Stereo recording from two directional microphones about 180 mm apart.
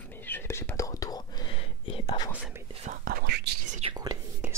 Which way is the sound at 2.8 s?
50° right (ahead or behind).